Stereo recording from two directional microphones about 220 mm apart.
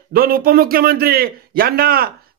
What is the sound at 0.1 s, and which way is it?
A man's voice, 40° right (ahead or behind).